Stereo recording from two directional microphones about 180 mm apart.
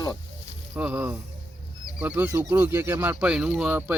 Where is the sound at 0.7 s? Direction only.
10° right (ahead or behind).